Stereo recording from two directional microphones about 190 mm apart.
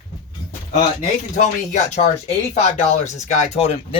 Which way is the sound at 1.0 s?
40° left (ahead or behind).